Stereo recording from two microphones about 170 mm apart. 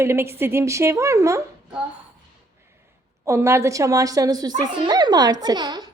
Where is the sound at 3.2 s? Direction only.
15° right (ahead or behind).